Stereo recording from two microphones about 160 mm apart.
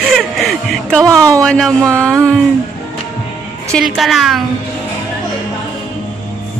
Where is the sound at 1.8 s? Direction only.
20° right (ahead or behind).